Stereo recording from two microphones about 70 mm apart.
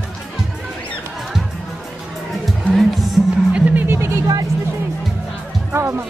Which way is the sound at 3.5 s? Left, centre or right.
Right.